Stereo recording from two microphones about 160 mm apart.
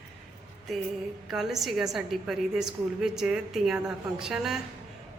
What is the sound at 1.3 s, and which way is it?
A woman's voice, centre (ahead or behind).